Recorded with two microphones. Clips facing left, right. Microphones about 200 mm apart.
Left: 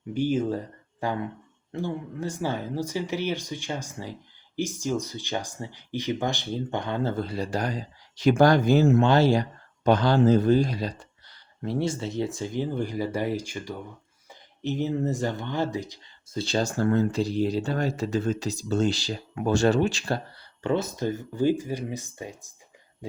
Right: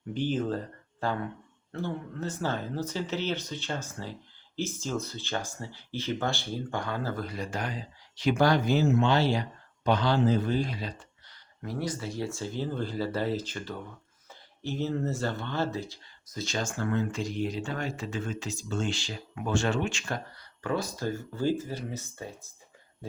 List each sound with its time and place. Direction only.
0.1 s speech: 10° left (ahead or behind); by 11.3 s 40° left (ahead or behind)
11.6 s speech: 25° left (ahead or behind)
16.3 s speech: 30° left (ahead or behind); by 22.4 s 15° left (ahead or behind)